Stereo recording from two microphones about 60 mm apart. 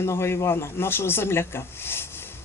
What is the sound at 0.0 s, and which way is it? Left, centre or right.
A woman's voice, left.